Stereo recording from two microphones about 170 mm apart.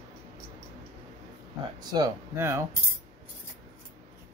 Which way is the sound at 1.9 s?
20° right (ahead or behind).